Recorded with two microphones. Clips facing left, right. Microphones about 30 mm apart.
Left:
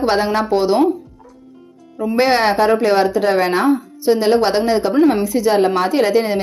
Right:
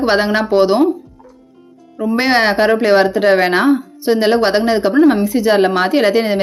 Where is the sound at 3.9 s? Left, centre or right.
Right.